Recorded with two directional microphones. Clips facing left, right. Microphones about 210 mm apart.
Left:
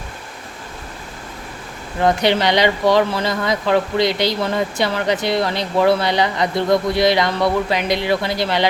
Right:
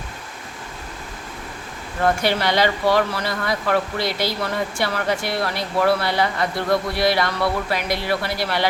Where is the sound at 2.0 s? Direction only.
20° left (ahead or behind).